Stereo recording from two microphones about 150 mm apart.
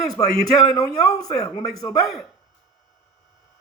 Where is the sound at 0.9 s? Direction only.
25° left (ahead or behind).